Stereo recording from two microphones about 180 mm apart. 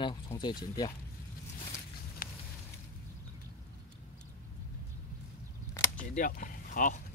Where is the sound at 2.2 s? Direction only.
50° left (ahead or behind).